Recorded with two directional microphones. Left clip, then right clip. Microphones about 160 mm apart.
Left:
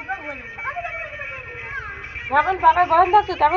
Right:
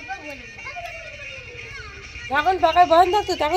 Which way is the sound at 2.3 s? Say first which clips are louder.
Left 3 dB; 85° right.